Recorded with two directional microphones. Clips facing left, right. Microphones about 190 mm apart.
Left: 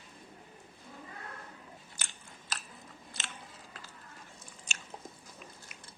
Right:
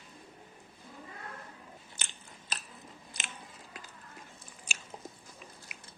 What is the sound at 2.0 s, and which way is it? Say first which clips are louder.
Biting: right 2 dB; 20° right (ahead or behind).